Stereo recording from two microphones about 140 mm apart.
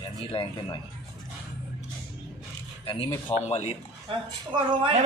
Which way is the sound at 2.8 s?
40° left (ahead or behind).